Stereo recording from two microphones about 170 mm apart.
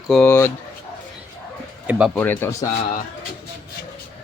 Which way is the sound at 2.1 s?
10° left (ahead or behind).